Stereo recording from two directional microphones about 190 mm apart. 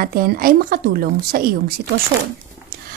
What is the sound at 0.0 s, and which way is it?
Speech, 50° right (ahead or behind).